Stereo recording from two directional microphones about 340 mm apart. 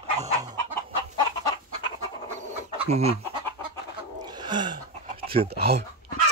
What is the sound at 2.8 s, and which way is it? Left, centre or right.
Speech, centre.